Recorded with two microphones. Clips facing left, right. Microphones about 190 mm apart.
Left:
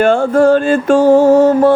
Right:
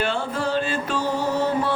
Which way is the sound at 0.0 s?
50° left (ahead or behind).